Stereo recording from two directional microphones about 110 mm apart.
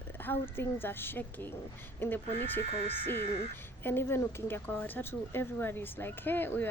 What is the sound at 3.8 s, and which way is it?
Speech, 20° left (ahead or behind).